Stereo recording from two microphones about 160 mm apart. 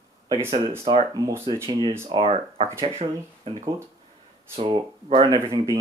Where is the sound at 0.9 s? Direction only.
30° right (ahead or behind).